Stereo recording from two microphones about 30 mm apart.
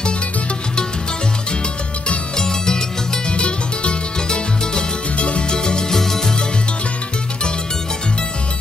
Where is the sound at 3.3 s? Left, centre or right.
Left.